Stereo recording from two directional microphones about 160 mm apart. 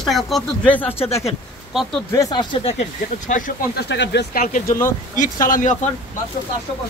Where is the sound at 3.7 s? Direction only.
90° left.